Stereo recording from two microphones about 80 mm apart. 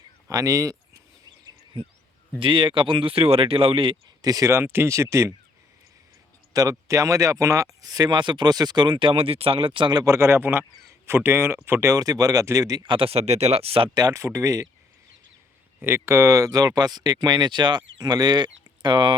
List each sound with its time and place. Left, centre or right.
0.3 s speech: right
2.4 s speech: right
4.2 s speech: right
4.5 s speech: right
6.5 s speech: right
10.0 s speech: right
12.8 s speech: right
13.8 s speech: right
14.1 s speech: right
15.8 s speech: right